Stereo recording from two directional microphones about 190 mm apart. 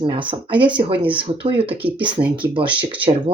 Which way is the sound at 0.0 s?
25° right (ahead or behind).